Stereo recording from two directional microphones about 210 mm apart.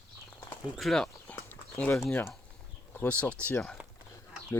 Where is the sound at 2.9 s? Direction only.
5° left (ahead or behind).